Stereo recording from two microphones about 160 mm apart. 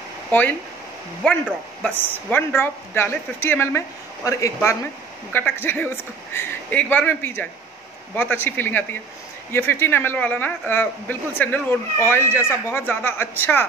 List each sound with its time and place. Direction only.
0.3 s speech: 10° left (ahead or behind)
1.8 s a man's voice: 10° left (ahead or behind)